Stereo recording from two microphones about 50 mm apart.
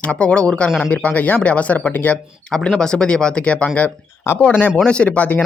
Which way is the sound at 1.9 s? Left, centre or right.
Left.